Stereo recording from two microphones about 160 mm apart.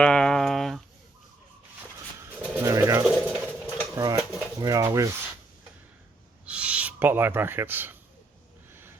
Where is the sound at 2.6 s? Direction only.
20° right (ahead or behind).